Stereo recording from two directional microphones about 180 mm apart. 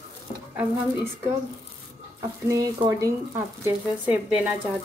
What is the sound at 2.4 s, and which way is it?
Speech, 20° right (ahead or behind).